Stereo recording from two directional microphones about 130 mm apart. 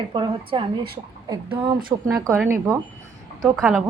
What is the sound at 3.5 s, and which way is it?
Speech, centre (ahead or behind).